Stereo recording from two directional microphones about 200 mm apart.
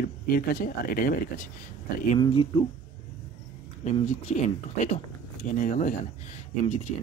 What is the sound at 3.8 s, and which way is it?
Speech, 35° left (ahead or behind).